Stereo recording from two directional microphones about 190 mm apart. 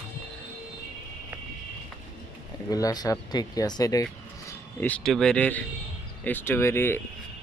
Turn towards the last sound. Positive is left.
turn(degrees=10)  # may be behind; listen again after turning